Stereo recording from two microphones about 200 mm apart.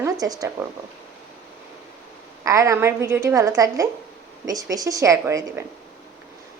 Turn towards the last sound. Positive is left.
turn(degrees=-15)  # may be behind; listen again after turning